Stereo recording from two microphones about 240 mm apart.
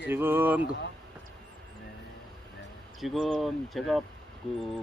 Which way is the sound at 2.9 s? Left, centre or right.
Centre.